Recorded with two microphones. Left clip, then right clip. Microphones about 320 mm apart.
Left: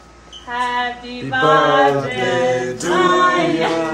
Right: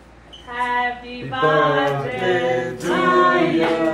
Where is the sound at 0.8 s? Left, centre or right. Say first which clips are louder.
Left 1 dB; left.